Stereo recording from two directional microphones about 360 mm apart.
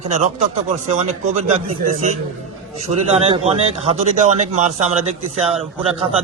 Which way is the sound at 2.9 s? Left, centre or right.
Centre.